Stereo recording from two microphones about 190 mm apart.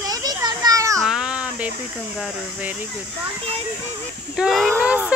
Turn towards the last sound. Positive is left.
turn(degrees=-5)  # may be behind; listen again after turning